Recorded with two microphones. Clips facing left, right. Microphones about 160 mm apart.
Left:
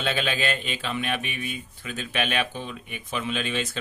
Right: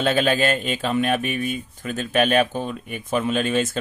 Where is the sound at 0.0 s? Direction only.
45° right (ahead or behind).